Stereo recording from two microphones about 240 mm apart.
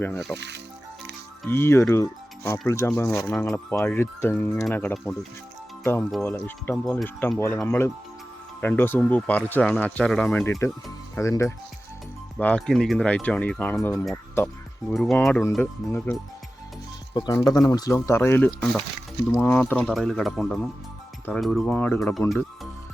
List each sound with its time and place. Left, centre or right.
0.3 s speech: right
1.5 s speech: centre
22.3 s music: centre